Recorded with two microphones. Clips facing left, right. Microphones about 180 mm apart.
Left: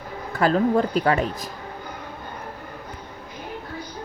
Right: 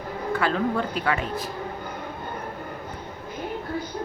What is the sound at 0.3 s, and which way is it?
Speech, 40° left (ahead or behind).